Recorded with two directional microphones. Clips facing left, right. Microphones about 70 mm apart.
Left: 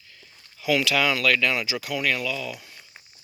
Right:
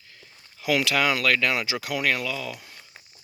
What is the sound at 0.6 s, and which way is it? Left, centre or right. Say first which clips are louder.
Speech: left 1 dB; right.